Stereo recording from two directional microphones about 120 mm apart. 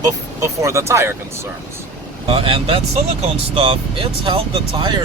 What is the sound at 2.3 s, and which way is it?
Speech, 50° right (ahead or behind).